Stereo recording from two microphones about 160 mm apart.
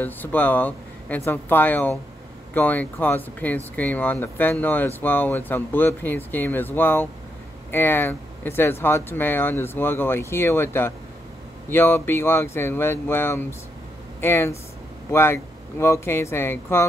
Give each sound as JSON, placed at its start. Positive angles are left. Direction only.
{"t": 0.0, "sound": "speech", "side_deg": 10}